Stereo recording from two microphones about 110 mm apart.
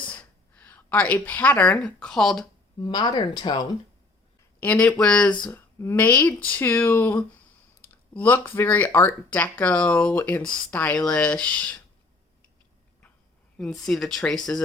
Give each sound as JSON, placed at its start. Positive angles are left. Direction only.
{"t": 0.1, "sound": "a woman's voice", "side_deg": 10}
{"t": 2.8, "sound": "speech", "side_deg": 40}
{"t": 4.6, "sound": "speech", "side_deg": 10}
{"t": 5.5, "sound": "speech", "side_deg": 20}
{"t": 13.6, "sound": "speech", "side_deg": 5}